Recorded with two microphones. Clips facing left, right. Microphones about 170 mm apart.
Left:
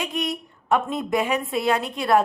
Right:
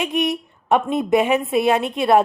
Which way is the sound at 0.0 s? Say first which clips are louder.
Right 6 dB; 20° right (ahead or behind).